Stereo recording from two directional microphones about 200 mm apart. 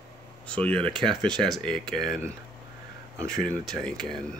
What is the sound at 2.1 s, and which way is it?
Speech, 15° right (ahead or behind).